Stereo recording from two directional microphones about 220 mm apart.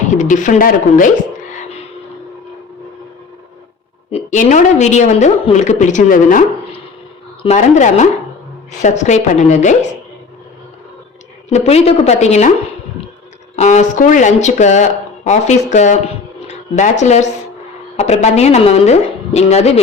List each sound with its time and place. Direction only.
0.1 s a woman's voice: 35° left (ahead or behind)
4.1 s a woman's voice: 35° left (ahead or behind)
7.4 s a woman's voice: 30° left (ahead or behind)
11.4 s a woman's voice: 30° left (ahead or behind)
13.6 s a woman's voice: 30° left (ahead or behind)